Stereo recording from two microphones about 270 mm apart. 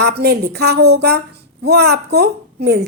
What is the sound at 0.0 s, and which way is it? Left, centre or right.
A woman's voice, right.